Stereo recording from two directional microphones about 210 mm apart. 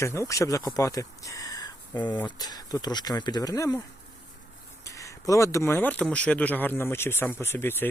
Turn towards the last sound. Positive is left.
turn(degrees=10)  # may be behind; listen again after turning